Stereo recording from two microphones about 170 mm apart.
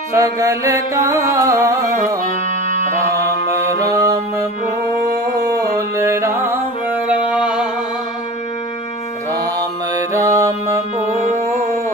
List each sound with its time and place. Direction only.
0.1 s music: 20° right (ahead or behind)
4.0 s music: 20° right (ahead or behind)
5.5 s music: 20° right (ahead or behind)
9.3 s mantra: 20° right (ahead or behind)